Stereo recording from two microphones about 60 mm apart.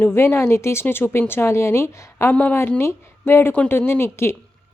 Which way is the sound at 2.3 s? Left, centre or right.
Left.